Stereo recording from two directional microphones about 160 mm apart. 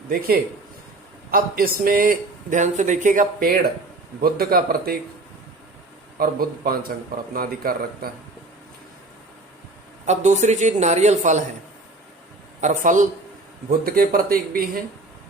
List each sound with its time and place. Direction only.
1.3 s speech: 65° right (ahead or behind)
6.1 s speech: 70° right (ahead or behind)
10.1 s speech: 45° right (ahead or behind)
12.5 s speech: 50° right (ahead or behind)
13.7 s speech: 65° right (ahead or behind)